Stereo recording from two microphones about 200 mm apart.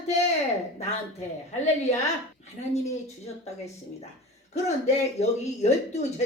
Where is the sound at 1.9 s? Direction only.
35° left (ahead or behind).